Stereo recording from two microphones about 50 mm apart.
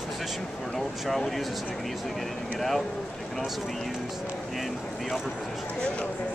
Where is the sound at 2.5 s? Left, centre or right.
Centre.